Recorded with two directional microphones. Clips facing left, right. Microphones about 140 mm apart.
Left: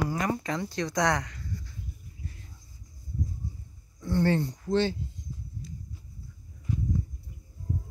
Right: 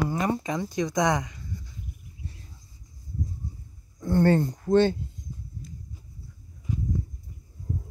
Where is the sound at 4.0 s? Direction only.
50° right (ahead or behind).